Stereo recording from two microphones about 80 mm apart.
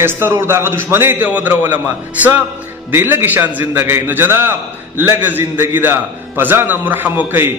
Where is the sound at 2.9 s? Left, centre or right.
Right.